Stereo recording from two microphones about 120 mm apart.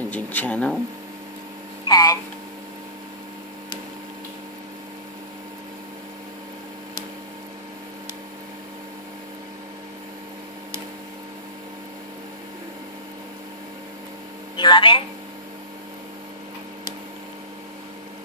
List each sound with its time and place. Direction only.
0.1 s speech: 15° left (ahead or behind)
1.9 s a sound: 30° left (ahead or behind)
14.6 s speech: 40° left (ahead or behind)